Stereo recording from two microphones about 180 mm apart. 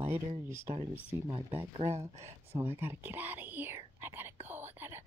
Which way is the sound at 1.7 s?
30° right (ahead or behind).